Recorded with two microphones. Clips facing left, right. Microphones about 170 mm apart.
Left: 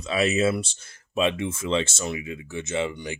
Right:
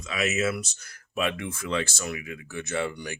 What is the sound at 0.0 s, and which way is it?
Speech, 30° left (ahead or behind).